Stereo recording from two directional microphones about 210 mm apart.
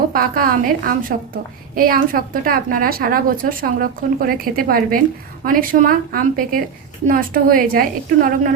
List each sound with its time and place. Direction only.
0.1 s a woman's voice: 45° right (ahead or behind)